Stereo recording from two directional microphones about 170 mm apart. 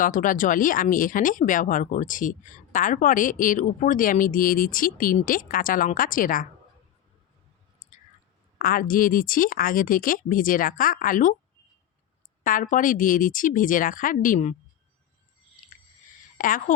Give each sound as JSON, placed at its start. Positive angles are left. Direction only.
{"t": 0.0, "sound": "speech", "side_deg": 50}
{"t": 7.8, "sound": "a sound", "side_deg": 45}
{"t": 8.5, "sound": "speech", "side_deg": 60}
{"t": 12.4, "sound": "speech", "side_deg": 50}
{"t": 16.4, "sound": "speech", "side_deg": 55}